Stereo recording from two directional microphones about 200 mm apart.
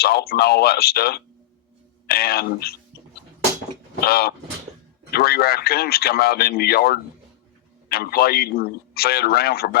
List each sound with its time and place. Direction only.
0.0 s a man's voice: 50° left (ahead or behind)
4.0 s a man's voice: 50° left (ahead or behind)